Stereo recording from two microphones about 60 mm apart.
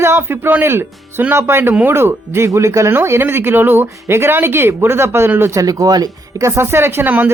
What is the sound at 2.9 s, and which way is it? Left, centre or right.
Speech, right.